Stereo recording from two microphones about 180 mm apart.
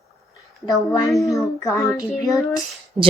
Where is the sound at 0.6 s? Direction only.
20° left (ahead or behind).